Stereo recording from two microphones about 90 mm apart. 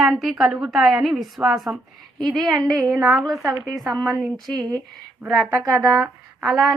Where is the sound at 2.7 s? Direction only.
45° right (ahead or behind).